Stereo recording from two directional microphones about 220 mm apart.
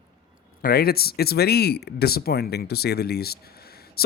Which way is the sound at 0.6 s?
45° left (ahead or behind).